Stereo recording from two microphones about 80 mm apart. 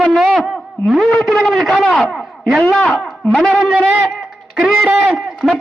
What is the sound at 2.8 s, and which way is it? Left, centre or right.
Speech, left.